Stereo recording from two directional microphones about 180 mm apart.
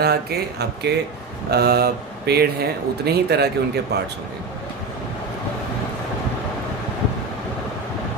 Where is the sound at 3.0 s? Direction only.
60° right (ahead or behind).